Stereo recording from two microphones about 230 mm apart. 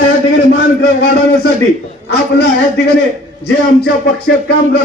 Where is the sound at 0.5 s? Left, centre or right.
Left.